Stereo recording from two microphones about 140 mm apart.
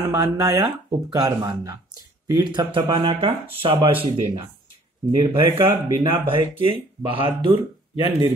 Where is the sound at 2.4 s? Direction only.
35° right (ahead or behind).